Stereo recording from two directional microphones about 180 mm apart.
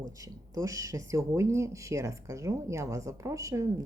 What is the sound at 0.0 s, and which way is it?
Speech, 20° right (ahead or behind).